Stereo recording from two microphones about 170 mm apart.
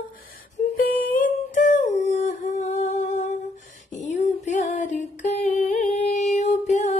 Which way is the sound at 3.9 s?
45° left (ahead or behind).